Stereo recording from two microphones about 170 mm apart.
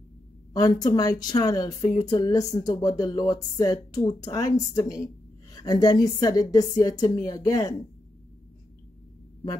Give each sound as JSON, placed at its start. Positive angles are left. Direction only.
{"t": 0.5, "sound": "speech", "side_deg": 20}